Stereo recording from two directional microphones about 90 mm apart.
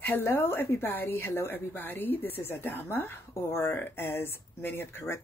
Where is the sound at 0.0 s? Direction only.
25° left (ahead or behind).